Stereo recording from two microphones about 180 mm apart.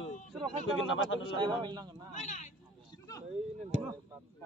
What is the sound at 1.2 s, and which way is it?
Speech, 25° right (ahead or behind).